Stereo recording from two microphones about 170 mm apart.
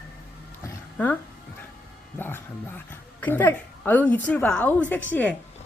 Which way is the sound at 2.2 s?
10° left (ahead or behind).